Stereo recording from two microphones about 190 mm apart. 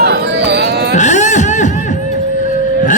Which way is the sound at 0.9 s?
40° left (ahead or behind).